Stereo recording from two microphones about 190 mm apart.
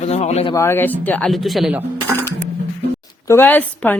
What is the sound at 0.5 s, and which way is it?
Speech, 15° left (ahead or behind).